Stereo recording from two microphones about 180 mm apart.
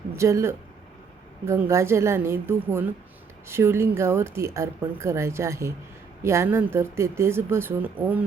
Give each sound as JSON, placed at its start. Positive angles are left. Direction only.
{"t": 0.2, "sound": "speech", "side_deg": -15}